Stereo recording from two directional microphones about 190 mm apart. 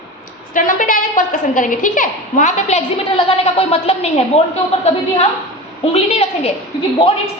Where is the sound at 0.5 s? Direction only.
45° left (ahead or behind).